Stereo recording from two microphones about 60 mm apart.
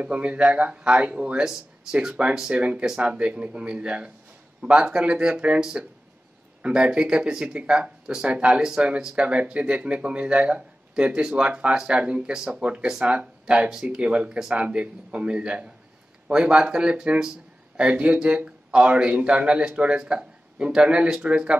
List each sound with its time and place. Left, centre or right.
0.0 s speech: right
2.5 s speech: right
2.8 s speech: centre
3.1 s speech: centre